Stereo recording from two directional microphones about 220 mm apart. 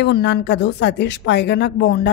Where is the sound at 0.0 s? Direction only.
50° left (ahead or behind).